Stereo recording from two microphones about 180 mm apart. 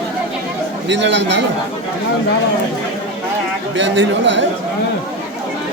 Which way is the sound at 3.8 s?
90° right.